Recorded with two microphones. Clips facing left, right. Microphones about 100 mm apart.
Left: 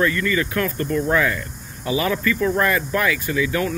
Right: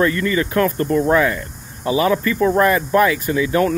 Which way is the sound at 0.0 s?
30° right (ahead or behind).